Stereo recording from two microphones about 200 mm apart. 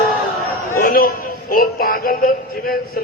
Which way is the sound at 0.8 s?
45° left (ahead or behind).